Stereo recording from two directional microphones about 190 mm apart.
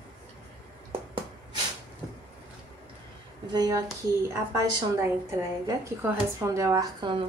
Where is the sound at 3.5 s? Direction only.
20° right (ahead or behind).